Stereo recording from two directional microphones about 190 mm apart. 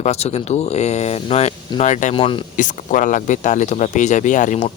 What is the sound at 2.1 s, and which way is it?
Speech, 25° left (ahead or behind).